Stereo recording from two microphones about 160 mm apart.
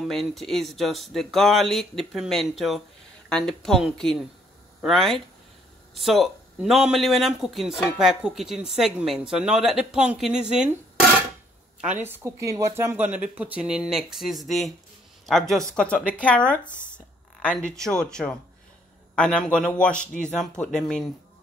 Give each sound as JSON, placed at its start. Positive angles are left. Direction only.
{"t": 0.0, "sound": "speech", "side_deg": 0}
{"t": 12.0, "sound": "speech", "side_deg": -15}